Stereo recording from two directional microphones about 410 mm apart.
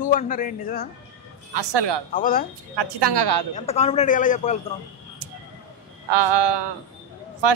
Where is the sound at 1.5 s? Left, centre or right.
Right.